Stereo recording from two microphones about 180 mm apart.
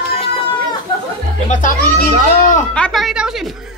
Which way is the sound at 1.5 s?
50° left (ahead or behind).